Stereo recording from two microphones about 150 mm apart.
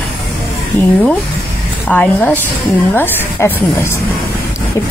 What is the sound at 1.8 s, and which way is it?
Speech, 10° left (ahead or behind).